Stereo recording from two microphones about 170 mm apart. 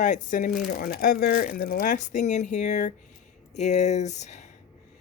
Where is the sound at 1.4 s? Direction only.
55° left (ahead or behind).